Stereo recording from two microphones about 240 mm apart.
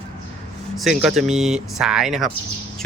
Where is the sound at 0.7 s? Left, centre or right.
Centre.